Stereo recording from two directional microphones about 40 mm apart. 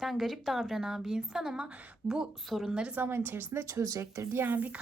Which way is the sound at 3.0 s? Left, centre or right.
Right.